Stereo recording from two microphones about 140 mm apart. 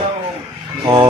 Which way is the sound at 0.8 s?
35° right (ahead or behind).